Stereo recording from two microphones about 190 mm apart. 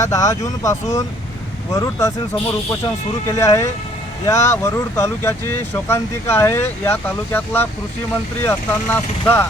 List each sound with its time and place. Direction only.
0.0 s speech: 15° left (ahead or behind)
3.2 s speech: 15° left (ahead or behind)